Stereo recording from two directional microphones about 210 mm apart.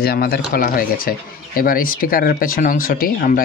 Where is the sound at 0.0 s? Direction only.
45° left (ahead or behind).